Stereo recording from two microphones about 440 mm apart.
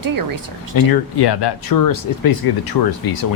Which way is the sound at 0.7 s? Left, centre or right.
Left.